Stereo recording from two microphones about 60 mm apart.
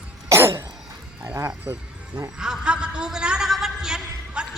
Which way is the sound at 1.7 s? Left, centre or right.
Right.